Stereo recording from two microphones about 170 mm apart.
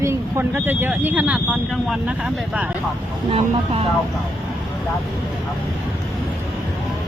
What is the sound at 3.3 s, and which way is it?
Speech, 35° right (ahead or behind).